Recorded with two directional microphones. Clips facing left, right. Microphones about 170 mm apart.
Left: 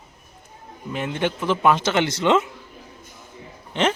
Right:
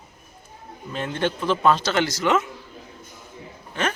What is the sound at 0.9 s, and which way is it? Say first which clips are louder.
A man's voice: left 1 dB; 15° left (ahead or behind).